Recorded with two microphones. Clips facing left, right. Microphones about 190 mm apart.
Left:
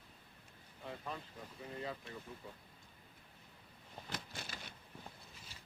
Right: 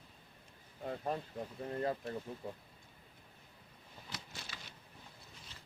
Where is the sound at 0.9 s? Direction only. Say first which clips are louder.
Right 7 dB; 50° right (ahead or behind).